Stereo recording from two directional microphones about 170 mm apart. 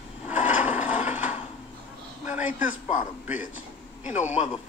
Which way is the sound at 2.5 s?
50° left (ahead or behind).